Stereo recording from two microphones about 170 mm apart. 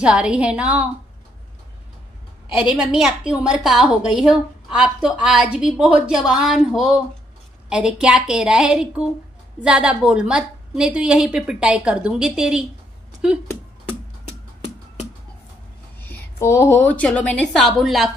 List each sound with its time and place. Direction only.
0.0 s a woman's voice: 5° right (ahead or behind)
2.5 s a woman's voice: 5° right (ahead or behind)
13.8 s music: 40° left (ahead or behind)
16.0 s a woman's voice: 15° left (ahead or behind)